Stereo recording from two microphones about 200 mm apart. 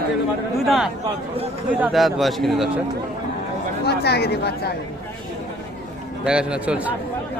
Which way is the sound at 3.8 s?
55° left (ahead or behind).